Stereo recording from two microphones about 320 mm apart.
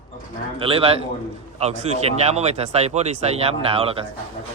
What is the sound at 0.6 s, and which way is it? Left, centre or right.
Speech, centre.